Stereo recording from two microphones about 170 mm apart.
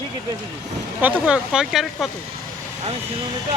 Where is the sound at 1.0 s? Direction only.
5° right (ahead or behind).